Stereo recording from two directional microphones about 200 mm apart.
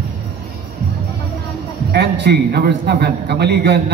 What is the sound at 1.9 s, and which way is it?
A man's voice, 55° right (ahead or behind).